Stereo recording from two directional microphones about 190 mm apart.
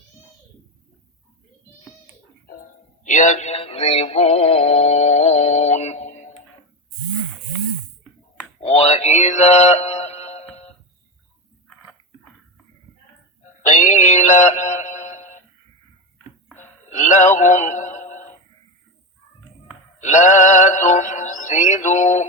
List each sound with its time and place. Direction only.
2.5 s music: 45° left (ahead or behind)
8.6 s mantra: 35° left (ahead or behind)
13.6 s synthetic singing: 40° left (ahead or behind)
16.6 s a sound: 40° left (ahead or behind)
20.0 s music: 40° left (ahead or behind)